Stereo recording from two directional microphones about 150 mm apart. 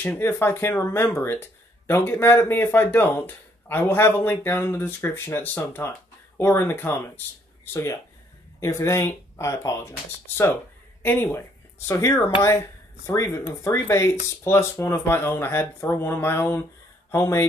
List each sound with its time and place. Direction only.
0.0 s speech: 15° left (ahead or behind)